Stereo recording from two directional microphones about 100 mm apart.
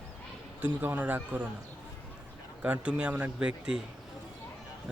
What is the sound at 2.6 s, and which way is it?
Speech, 10° right (ahead or behind).